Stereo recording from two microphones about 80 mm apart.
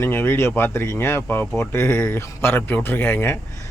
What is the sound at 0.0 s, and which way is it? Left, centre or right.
Speech, left.